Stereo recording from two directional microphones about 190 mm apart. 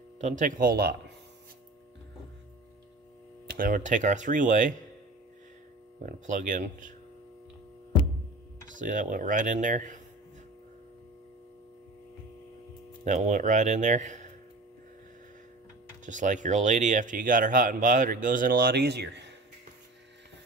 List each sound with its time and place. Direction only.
0.2 s speech: 40° right (ahead or behind)
3.4 s speech: 45° right (ahead or behind)
6.0 s speech: 40° right (ahead or behind)
8.6 s speech: 40° right (ahead or behind)
13.0 s speech: 40° right (ahead or behind)
16.1 s speech: 40° right (ahead or behind); by 19.3 s 65° right (ahead or behind)